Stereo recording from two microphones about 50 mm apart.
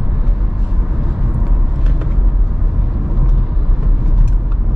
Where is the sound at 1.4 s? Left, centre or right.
Centre.